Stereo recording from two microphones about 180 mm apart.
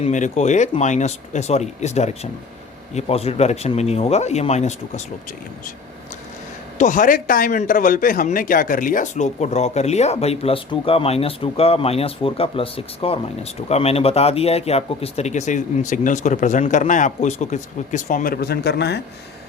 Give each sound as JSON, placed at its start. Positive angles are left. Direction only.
{"t": 0.0, "sound": "speech", "side_deg": 40}
{"t": 6.7, "sound": "speech", "side_deg": 45}